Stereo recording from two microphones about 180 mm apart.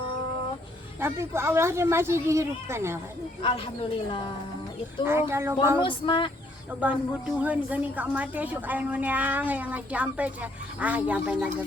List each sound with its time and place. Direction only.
0.9 s a woman's voice: 15° right (ahead or behind)
5.0 s a woman's voice: 15° right (ahead or behind)
5.8 s a sound: 30° left (ahead or behind)
6.7 s a woman's voice: 5° right (ahead or behind)